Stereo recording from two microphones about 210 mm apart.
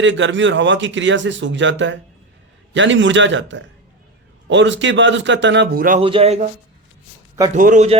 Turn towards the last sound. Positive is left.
turn(degrees=-35)  # may be behind; listen again after turning